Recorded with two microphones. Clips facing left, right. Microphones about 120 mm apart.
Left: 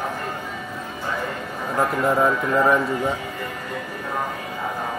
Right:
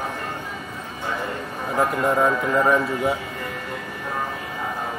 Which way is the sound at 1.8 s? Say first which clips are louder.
Even; centre (ahead or behind).